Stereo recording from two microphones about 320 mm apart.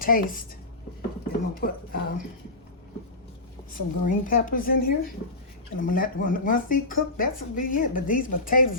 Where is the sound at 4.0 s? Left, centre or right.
Left.